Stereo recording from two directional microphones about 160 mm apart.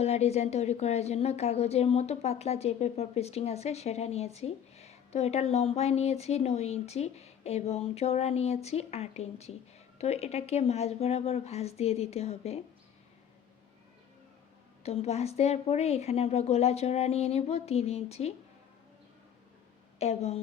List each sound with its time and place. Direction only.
0.0 s a woman's voice: 40° left (ahead or behind)
14.8 s a woman's voice: 40° left (ahead or behind)
20.0 s a woman's voice: 40° left (ahead or behind)